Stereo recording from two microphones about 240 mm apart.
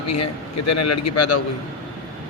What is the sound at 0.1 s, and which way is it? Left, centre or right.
A man's voice, left.